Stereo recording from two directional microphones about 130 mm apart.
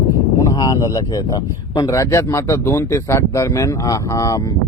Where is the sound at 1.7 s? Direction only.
25° left (ahead or behind).